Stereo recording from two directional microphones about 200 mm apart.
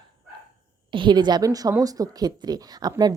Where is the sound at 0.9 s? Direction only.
25° right (ahead or behind).